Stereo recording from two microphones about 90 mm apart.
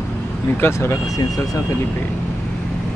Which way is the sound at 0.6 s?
30° left (ahead or behind).